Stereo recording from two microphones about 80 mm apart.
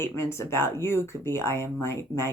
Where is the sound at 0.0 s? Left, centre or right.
Left.